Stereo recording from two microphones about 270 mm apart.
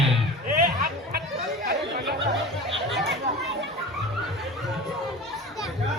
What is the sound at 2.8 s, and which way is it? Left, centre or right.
Chatter, centre.